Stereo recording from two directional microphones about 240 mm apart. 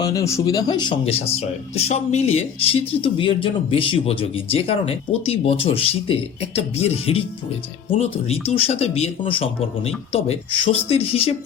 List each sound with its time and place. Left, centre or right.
0.0 s speech: centre